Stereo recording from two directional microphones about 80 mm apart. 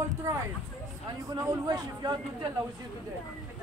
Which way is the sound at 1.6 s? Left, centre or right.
Right.